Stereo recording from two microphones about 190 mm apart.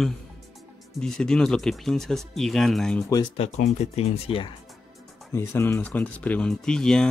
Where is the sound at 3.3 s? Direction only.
35° left (ahead or behind).